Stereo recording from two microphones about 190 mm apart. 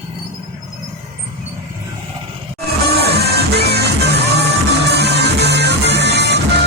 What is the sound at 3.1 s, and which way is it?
Music, 60° right (ahead or behind).